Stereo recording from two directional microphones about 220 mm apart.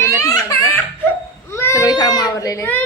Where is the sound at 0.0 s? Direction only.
10° left (ahead or behind).